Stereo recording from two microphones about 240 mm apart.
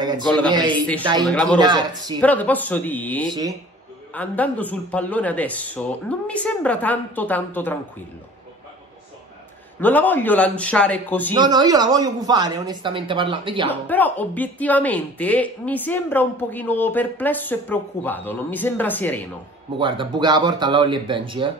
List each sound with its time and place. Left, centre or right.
0.2 s a man's voice: centre
0.5 s speech: centre
1.2 s a man's voice: centre
1.6 s speech: centre
2.1 s a woman's voice: centre
9.8 s a woman's voice: centre
11.3 s speech: centre
13.7 s a woman's voice: centre
19.8 s speech: centre